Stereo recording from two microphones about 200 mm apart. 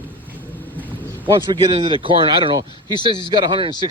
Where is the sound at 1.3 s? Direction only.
25° right (ahead or behind).